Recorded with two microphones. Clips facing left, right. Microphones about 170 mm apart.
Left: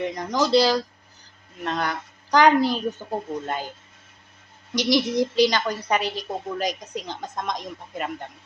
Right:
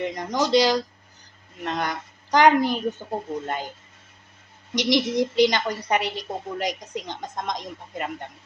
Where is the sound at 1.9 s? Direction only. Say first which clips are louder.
Left 1 dB; 20° right (ahead or behind).